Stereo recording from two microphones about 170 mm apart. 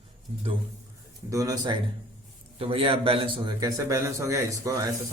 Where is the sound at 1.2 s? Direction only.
20° right (ahead or behind).